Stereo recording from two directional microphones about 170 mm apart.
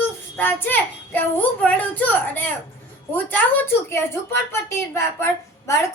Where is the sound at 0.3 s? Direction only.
10° left (ahead or behind).